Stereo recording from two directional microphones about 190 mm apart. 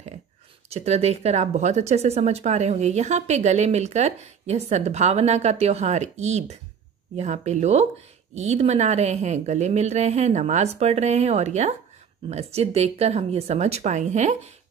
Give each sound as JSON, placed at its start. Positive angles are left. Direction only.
{"t": 0.7, "sound": "speech", "side_deg": -35}